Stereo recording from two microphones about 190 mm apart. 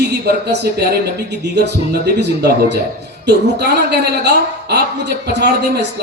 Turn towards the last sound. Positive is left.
turn(degrees=-60)  # may be behind; listen again after turning